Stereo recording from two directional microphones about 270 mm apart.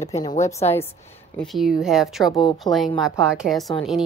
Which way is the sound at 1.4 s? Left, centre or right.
Centre.